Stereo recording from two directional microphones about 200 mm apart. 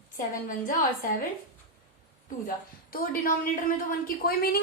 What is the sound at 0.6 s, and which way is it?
Speech, 45° left (ahead or behind).